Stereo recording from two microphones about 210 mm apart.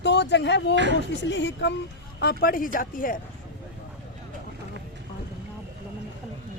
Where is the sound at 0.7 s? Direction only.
60° right (ahead or behind).